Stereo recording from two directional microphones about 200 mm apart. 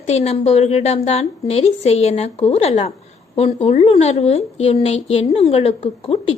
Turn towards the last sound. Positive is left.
turn(degrees=30)  # may be behind; listen again after turning